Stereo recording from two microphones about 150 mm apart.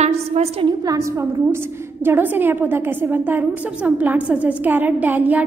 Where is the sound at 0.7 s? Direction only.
25° right (ahead or behind).